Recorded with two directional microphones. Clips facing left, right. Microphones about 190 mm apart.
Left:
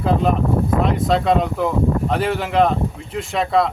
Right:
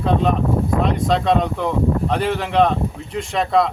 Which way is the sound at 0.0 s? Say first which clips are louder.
Even; 5° left (ahead or behind).